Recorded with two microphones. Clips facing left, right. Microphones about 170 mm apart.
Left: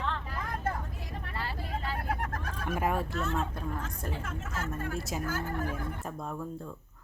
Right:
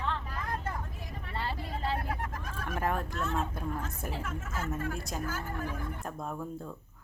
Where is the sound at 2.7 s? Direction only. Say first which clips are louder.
Left 1 dB; 10° left (ahead or behind).